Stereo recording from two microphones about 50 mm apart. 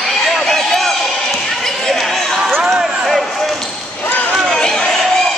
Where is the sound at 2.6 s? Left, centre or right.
Right.